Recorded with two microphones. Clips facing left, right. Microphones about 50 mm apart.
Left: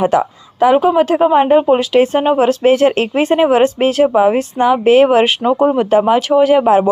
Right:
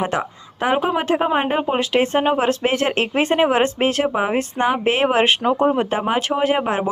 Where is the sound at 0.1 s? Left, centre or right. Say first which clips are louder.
Left 9 dB; right.